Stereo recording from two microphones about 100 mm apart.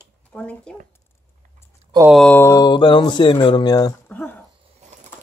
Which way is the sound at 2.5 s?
45° left (ahead or behind).